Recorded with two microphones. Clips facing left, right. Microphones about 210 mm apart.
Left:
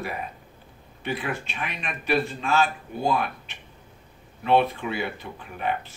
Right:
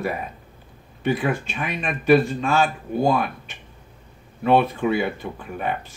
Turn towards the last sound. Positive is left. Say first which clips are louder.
# right 2 dB
turn(degrees=-50)  # may be behind; listen again after turning